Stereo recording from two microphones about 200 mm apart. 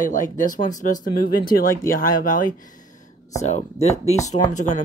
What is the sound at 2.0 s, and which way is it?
Speech, 45° left (ahead or behind).